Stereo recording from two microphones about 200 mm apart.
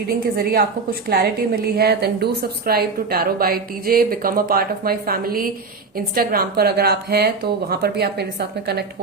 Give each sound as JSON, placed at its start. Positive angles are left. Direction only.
{"t": 0.1, "sound": "a woman's voice", "side_deg": -50}